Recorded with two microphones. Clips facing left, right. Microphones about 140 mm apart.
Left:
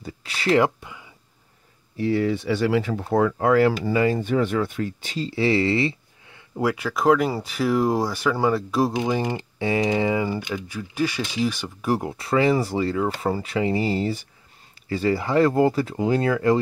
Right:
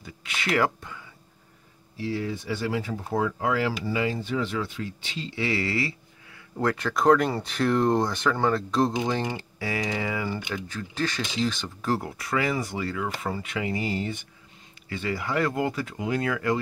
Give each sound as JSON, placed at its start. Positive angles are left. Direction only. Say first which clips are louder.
{"t": 0.0, "sound": "a sound", "louder": "left 6 dB", "side_deg": 35}
{"t": 0.7, "sound": "a sound", "louder": "even", "side_deg": 15}
{"t": 2.0, "sound": "speech", "louder": "left 8 dB", "side_deg": 60}
{"t": 6.6, "sound": "speech", "louder": "left 2 dB", "side_deg": 5}
{"t": 9.6, "sound": "speech", "louder": "left 8 dB", "side_deg": 25}
{"t": 10.5, "sound": "speech", "louder": "left 3 dB", "side_deg": 10}
{"t": 12.1, "sound": "speech", "louder": "left 7 dB", "side_deg": 30}